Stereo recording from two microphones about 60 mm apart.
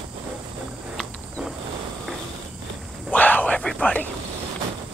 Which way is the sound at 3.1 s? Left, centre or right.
Left.